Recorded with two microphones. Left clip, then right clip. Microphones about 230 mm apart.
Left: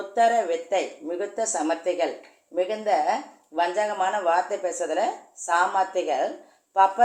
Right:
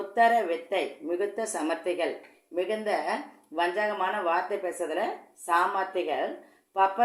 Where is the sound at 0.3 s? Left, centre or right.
Right.